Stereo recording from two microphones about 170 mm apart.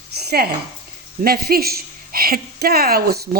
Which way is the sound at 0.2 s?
70° right (ahead or behind).